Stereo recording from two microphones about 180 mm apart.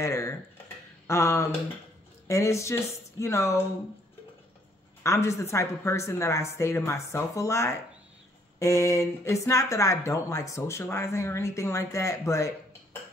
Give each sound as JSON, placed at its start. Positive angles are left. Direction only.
{"t": 0.0, "sound": "speech", "side_deg": 15}
{"t": 5.0, "sound": "speech", "side_deg": 15}